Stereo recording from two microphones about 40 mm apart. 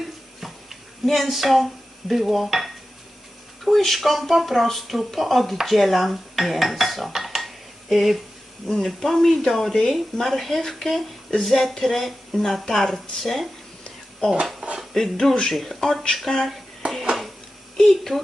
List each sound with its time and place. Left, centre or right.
0.3 s a sound: centre
1.0 s speech: centre
5.6 s dishes: centre
8.8 s speech: centre
14.2 s speech: left
14.9 s speech: centre
16.1 s a sound: centre
16.8 s dishes: right
17.7 s a woman's voice: centre